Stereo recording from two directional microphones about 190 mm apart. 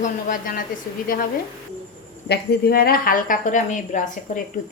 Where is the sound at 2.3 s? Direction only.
55° left (ahead or behind).